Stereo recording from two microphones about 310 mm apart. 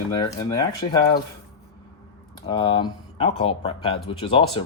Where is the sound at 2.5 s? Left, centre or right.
Centre.